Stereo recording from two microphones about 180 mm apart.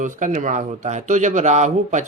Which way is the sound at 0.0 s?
45° right (ahead or behind).